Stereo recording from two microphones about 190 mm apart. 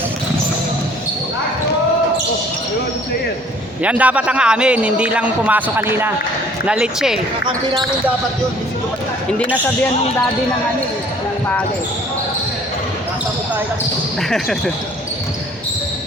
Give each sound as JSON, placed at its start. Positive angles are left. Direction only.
{"t": 3.8, "sound": "speech", "side_deg": -5}
{"t": 7.4, "sound": "speech", "side_deg": -25}
{"t": 14.2, "sound": "speech", "side_deg": 0}